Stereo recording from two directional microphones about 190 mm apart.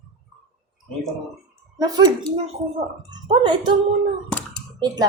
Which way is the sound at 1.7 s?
20° right (ahead or behind).